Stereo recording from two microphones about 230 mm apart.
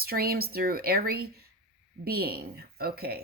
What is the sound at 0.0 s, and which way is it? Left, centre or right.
Speech, right.